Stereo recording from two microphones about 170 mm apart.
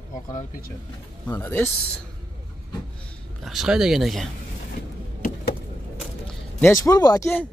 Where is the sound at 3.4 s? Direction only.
Centre (ahead or behind).